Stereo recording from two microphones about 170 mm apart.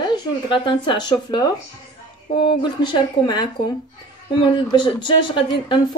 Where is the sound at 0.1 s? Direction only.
25° left (ahead or behind).